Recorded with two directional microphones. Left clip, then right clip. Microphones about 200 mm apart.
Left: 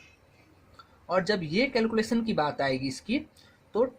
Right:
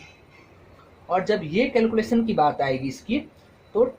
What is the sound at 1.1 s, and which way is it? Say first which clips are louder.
Speech: right 4 dB; 40° left (ahead or behind).